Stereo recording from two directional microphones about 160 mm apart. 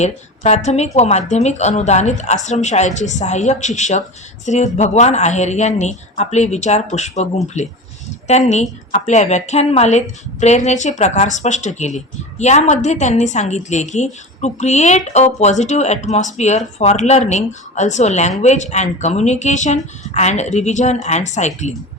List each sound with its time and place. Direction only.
0.0 s a woman's voice: 45° left (ahead or behind)